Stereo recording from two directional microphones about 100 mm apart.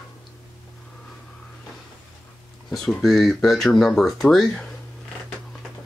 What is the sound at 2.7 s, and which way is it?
Speech, centre (ahead or behind).